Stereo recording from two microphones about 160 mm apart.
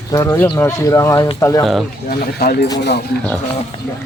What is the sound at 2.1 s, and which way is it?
Speech, 80° left.